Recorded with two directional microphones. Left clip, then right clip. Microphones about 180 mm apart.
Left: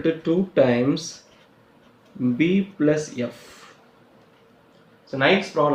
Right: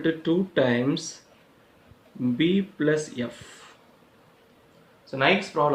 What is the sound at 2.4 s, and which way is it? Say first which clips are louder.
Speech: left 2 dB; 40° right (ahead or behind).